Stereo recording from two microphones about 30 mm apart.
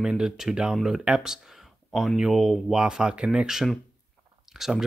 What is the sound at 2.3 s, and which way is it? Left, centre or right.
Speech, centre.